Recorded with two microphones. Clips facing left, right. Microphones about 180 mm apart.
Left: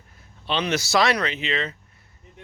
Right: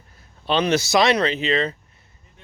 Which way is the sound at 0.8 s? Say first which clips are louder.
Right 3 dB; 20° right (ahead or behind).